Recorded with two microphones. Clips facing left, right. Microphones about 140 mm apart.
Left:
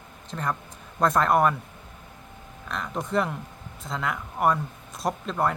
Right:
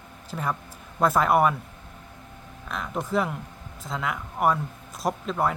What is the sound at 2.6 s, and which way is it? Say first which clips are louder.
Speech: right 1 dB; centre (ahead or behind).